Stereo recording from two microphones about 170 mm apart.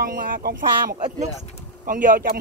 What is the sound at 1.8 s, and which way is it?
Speech, 50° right (ahead or behind).